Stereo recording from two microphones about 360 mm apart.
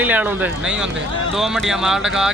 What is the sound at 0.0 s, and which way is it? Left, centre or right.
Speech, centre.